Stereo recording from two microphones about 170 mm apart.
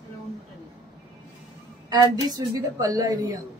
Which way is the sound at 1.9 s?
25° right (ahead or behind).